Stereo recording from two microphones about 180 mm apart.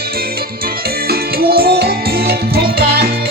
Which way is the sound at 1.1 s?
55° right (ahead or behind).